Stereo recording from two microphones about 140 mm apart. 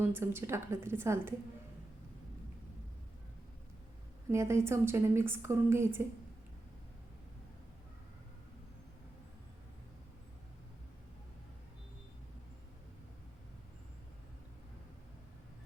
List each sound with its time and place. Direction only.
0.0 s a woman's voice: 15° right (ahead or behind)
4.3 s a woman's voice: 20° right (ahead or behind)